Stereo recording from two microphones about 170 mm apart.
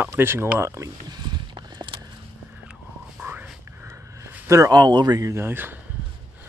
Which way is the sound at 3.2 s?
15° right (ahead or behind).